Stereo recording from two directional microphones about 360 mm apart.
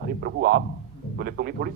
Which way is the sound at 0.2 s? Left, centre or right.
Right.